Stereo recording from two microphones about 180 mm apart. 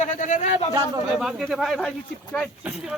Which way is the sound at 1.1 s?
5° right (ahead or behind).